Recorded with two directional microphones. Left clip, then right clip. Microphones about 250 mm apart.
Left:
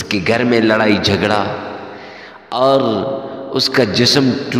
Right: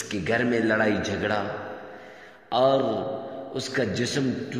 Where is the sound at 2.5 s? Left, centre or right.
Left.